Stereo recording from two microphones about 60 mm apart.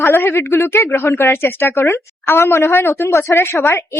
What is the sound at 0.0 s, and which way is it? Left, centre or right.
A woman's voice, left.